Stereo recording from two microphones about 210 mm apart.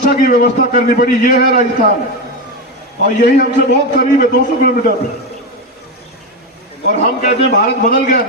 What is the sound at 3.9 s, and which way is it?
Speech, 45° left (ahead or behind).